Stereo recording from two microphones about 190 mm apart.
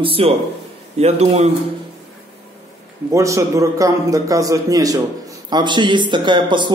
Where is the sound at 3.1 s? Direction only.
15° right (ahead or behind).